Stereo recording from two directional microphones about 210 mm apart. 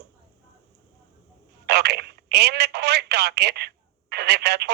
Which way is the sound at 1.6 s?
50° right (ahead or behind).